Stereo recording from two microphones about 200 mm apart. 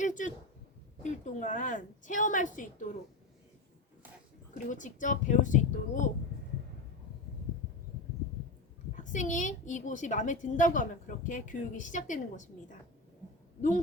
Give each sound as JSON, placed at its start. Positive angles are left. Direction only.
{"t": 0.0, "sound": "a woman's voice", "side_deg": 40}
{"t": 4.5, "sound": "a woman's voice", "side_deg": 40}
{"t": 9.1, "sound": "a woman's voice", "side_deg": 40}